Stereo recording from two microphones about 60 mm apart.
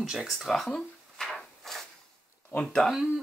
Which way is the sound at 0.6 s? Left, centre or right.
Centre.